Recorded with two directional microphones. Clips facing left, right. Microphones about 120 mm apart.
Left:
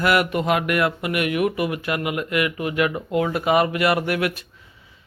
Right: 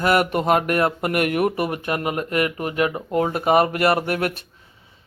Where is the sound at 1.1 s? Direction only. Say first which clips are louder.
Right 1 dB; 45° right (ahead or behind).